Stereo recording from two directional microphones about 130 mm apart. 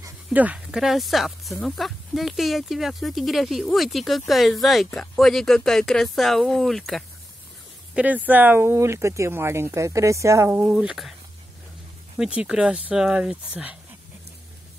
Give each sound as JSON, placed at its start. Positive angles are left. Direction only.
{"t": 0.3, "sound": "speech", "side_deg": -10}
{"t": 7.9, "sound": "speech", "side_deg": -10}
{"t": 10.7, "sound": "speech", "side_deg": -5}
{"t": 12.2, "sound": "speech", "side_deg": -10}